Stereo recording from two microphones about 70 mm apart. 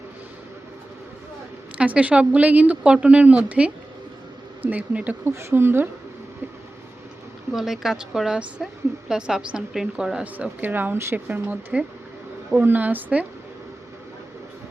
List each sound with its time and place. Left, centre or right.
1.8 s speech: centre
5.2 s speech: right
7.5 s a woman's voice: centre
10.3 s speech: right
10.9 s speech: right
11.3 s speech: right